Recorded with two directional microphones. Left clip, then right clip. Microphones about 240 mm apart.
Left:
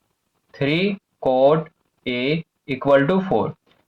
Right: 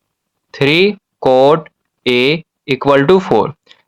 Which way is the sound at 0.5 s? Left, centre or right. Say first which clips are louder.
Right 10 dB; right.